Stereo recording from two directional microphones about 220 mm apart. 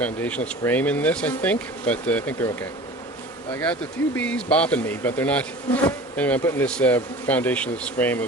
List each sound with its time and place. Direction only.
0.0 s speech: 5° left (ahead or behind)